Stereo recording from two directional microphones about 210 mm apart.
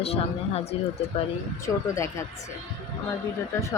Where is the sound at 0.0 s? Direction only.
30° left (ahead or behind).